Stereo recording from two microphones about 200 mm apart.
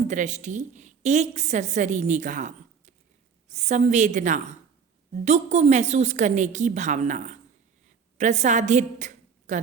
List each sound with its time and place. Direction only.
0.1 s a woman's voice: 35° right (ahead or behind)